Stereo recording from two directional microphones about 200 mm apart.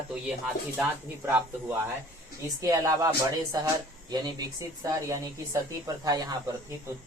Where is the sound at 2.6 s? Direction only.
15° right (ahead or behind).